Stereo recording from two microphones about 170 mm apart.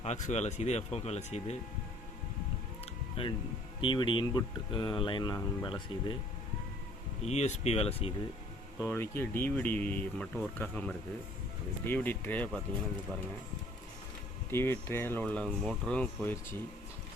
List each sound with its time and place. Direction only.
0.0 s speech: 40° left (ahead or behind)
2.8 s a sound: 30° left (ahead or behind)
3.8 s speech: 30° left (ahead or behind)
7.2 s speech: 40° left (ahead or behind)
8.8 s speech: 15° left (ahead or behind)
14.5 s speech: 15° left (ahead or behind)